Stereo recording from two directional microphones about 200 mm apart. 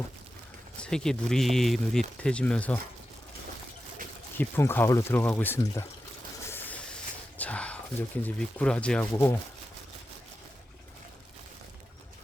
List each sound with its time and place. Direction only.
0.8 s speech: 5° left (ahead or behind)
4.4 s speech: 10° left (ahead or behind)
6.5 s a sound: 10° left (ahead or behind)
7.3 s speech: 5° left (ahead or behind)